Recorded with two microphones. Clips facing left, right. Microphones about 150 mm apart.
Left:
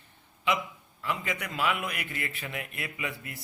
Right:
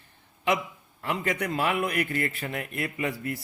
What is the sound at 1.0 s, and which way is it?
A man's voice, 45° right (ahead or behind).